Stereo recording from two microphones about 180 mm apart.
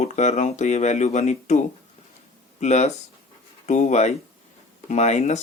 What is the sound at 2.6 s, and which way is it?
Speech, 40° left (ahead or behind).